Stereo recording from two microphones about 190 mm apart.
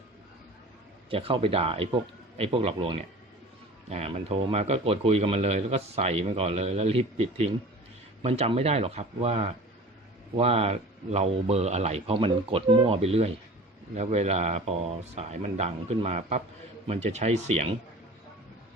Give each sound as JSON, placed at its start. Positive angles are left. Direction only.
{"t": 1.1, "sound": "speech", "side_deg": -30}